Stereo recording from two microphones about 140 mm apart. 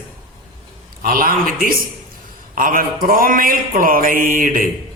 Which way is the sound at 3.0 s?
90° right.